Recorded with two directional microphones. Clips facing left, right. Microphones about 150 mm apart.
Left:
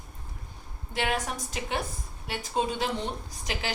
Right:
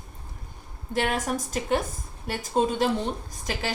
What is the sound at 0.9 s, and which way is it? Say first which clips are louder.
Speech: right 4 dB; 45° right (ahead or behind).